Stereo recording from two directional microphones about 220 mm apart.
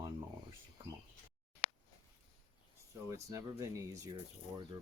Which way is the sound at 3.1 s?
15° right (ahead or behind).